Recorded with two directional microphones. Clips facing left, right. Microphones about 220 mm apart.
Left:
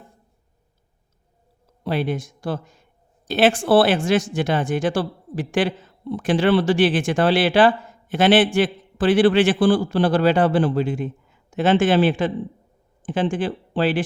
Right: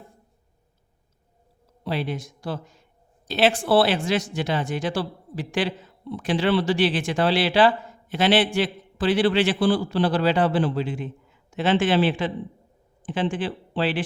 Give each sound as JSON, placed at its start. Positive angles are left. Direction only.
{"t": 1.8, "sound": "speech", "side_deg": 50}